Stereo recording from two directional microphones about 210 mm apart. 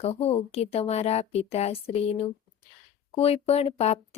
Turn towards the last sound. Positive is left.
turn(degrees=30)  # may be behind; listen again after turning